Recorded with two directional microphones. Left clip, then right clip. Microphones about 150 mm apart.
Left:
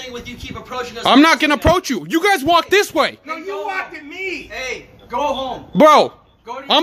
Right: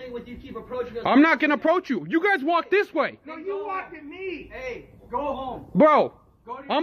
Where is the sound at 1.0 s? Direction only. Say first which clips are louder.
Left 7 dB; 30° left (ahead or behind).